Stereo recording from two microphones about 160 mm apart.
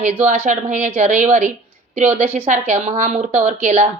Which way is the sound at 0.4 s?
50° right (ahead or behind).